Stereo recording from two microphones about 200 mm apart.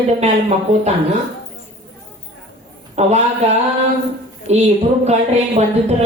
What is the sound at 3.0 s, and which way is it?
Speech, 35° right (ahead or behind).